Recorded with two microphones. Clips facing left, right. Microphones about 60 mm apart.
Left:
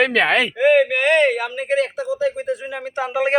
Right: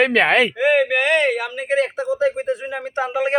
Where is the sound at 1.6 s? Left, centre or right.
Right.